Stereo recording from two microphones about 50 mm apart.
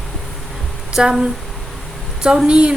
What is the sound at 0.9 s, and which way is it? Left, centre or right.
Speech, centre.